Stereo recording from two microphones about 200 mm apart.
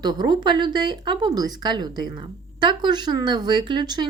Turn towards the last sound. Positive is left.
turn(degrees=-20)  # may be behind; listen again after turning